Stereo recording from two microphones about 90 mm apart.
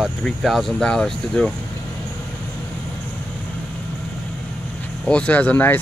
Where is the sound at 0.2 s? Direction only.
Centre (ahead or behind).